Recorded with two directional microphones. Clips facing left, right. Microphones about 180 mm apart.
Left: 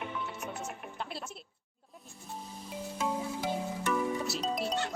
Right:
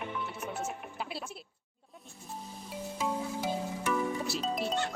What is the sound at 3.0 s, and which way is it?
Music, 5° right (ahead or behind).